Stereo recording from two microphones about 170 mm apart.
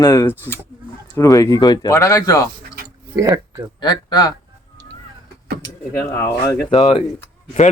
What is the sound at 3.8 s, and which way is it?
Speech, 25° left (ahead or behind).